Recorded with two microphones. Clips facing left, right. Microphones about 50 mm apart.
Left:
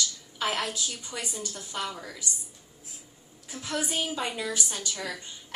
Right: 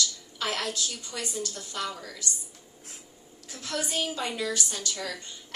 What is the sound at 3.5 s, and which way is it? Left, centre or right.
A woman's voice, centre.